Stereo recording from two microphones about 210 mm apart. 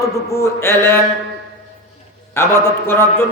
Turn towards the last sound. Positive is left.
turn(degrees=10)  # may be behind; listen again after turning